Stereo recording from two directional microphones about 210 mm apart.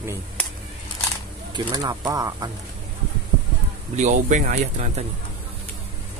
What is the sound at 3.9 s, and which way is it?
Speech, 35° right (ahead or behind).